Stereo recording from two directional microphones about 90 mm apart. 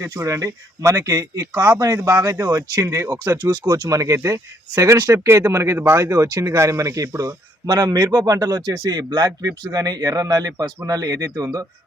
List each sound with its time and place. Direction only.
0.0 s speech: 35° right (ahead or behind); by 3.8 s 55° right (ahead or behind)
3.8 s speech: 40° right (ahead or behind)